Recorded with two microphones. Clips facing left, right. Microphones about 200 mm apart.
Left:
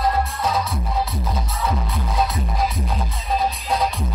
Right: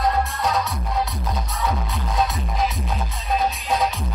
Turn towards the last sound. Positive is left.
turn(degrees=0)  # may be behind; listen again after turning